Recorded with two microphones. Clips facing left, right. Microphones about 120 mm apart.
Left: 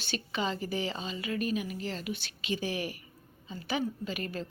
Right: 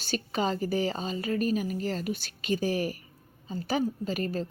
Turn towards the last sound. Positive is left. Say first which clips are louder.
# right 5 dB
turn(degrees=-40)  # may be behind; listen again after turning